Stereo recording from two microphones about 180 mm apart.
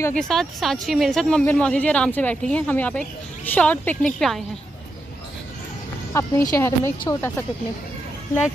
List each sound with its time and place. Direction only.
0.1 s speech: 5° left (ahead or behind)
6.1 s speech: 15° left (ahead or behind)